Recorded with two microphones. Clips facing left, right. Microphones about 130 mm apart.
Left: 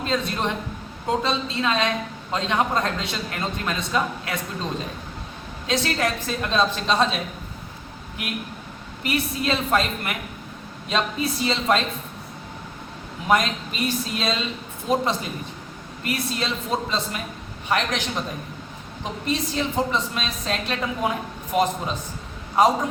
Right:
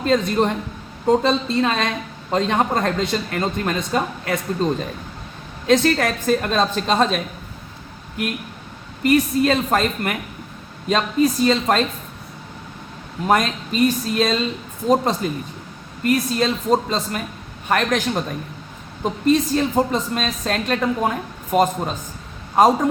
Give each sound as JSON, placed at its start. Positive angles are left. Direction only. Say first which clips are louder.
{"t": 0.0, "sound": "a woman's voice", "louder": "right 7 dB", "side_deg": -50}
{"t": 5.6, "sound": "a woman's voice", "louder": "right 7 dB", "side_deg": -50}
{"t": 9.0, "sound": "a woman's voice", "louder": "right 8 dB", "side_deg": -45}
{"t": 13.2, "sound": "a woman's voice", "louder": "right 3 dB", "side_deg": -45}